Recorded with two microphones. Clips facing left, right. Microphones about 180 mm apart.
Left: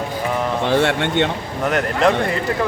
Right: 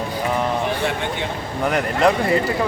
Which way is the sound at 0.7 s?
80° left.